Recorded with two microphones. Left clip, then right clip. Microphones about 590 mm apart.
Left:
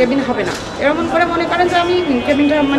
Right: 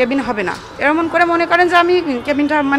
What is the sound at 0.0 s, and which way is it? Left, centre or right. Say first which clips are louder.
Speech: left 1 dB; right.